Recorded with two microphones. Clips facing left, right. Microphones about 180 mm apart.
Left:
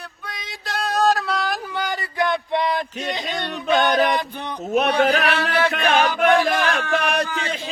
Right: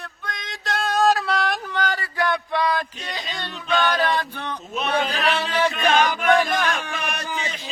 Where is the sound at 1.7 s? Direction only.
15° left (ahead or behind).